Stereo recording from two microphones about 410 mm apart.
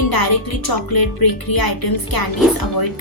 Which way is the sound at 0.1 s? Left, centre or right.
Left.